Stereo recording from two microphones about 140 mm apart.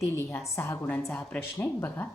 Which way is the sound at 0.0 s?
20° left (ahead or behind).